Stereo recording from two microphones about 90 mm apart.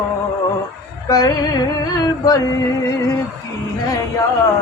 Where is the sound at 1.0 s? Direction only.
45° left (ahead or behind).